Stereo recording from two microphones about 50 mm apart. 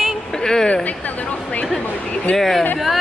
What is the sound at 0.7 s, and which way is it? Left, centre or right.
Speech, left.